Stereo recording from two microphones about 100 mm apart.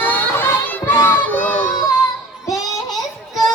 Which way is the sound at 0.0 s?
20° left (ahead or behind).